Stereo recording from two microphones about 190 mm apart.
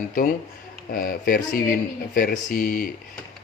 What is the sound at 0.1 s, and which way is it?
A man's voice, 45° left (ahead or behind).